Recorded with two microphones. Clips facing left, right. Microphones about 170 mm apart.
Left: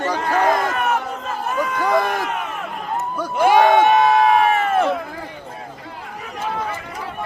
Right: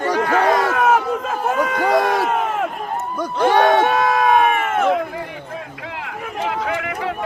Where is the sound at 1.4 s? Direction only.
85° right.